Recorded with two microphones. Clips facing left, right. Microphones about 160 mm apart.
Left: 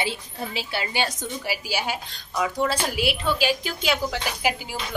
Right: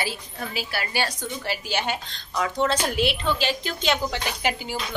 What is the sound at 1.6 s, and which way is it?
A woman's voice, 5° left (ahead or behind).